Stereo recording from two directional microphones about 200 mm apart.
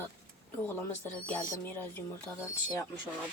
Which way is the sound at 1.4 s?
10° left (ahead or behind).